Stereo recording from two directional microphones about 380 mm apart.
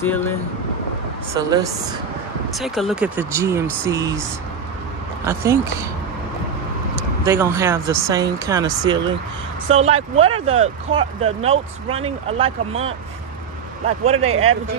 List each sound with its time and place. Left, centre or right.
0.0 s speech: centre
1.3 s speech: centre
5.2 s speech: centre
7.0 s speech: centre
14.2 s speech: right